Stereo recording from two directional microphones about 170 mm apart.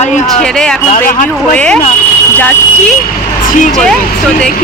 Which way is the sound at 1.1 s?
50° left (ahead or behind).